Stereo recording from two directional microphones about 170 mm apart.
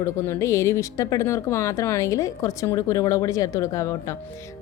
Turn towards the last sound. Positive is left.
turn(degrees=20)  # may be behind; listen again after turning